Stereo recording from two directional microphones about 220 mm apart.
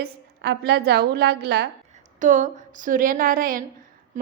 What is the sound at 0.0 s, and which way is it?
A woman's voice, 45° right (ahead or behind).